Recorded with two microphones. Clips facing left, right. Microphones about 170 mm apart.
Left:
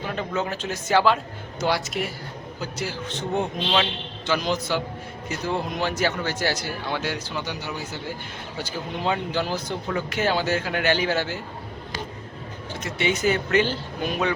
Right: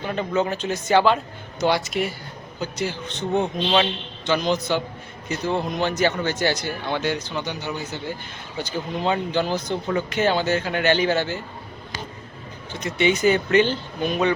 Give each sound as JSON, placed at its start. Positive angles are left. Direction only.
{"t": 0.1, "sound": "a man's voice", "side_deg": 0}
{"t": 12.8, "sound": "a man's voice", "side_deg": 5}